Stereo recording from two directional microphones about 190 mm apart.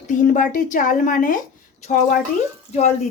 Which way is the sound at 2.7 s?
35° left (ahead or behind).